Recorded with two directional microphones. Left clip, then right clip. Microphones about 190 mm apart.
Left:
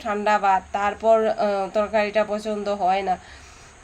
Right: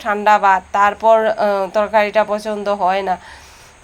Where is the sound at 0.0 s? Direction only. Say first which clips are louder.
Right 8 dB; 5° right (ahead or behind).